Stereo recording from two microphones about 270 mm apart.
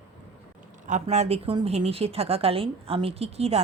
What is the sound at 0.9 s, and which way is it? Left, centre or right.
A woman's voice, right.